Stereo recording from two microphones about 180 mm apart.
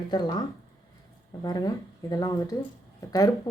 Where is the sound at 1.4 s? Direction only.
20° left (ahead or behind).